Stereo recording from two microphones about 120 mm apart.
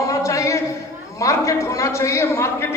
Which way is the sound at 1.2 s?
25° left (ahead or behind).